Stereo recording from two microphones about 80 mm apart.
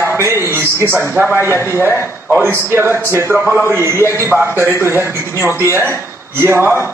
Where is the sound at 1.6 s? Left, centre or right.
Left.